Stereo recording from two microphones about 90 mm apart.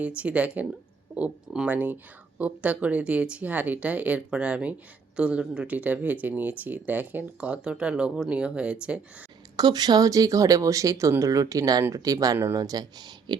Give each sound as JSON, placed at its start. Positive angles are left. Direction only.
{"t": 0.0, "sound": "speech", "side_deg": -15}
{"t": 9.6, "sound": "speech", "side_deg": -50}
{"t": 12.4, "sound": "speech", "side_deg": -30}
{"t": 12.6, "sound": "speech", "side_deg": -45}